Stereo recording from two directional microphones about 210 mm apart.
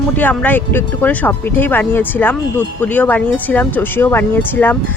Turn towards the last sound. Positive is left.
turn(degrees=10)  # may be behind; listen again after turning